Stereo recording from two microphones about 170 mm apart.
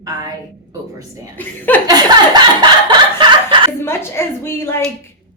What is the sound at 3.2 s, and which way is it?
Chuckle, 30° right (ahead or behind).